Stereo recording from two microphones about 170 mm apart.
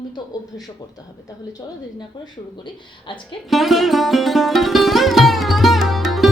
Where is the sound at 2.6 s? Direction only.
30° left (ahead or behind).